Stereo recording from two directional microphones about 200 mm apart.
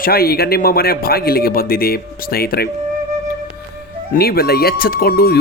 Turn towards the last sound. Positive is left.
turn(degrees=50)  # may be behind; listen again after turning